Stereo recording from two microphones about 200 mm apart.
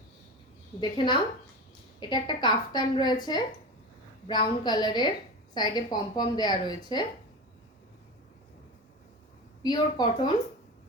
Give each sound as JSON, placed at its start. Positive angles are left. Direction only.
{"t": 0.8, "sound": "a woman's voice", "side_deg": 25}
{"t": 9.6, "sound": "a woman's voice", "side_deg": 20}